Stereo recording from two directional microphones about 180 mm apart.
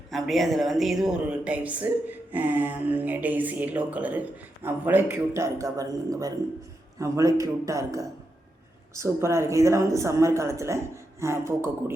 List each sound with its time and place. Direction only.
0.1 s speech: centre (ahead or behind)